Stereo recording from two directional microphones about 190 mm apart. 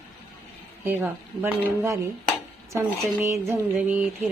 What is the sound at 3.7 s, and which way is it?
Speech, 10° right (ahead or behind).